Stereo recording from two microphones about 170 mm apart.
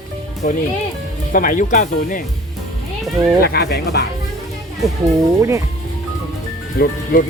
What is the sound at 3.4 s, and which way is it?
Speech, 65° left (ahead or behind).